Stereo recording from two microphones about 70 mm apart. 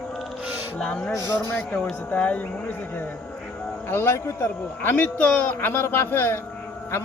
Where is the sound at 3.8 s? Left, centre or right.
Left.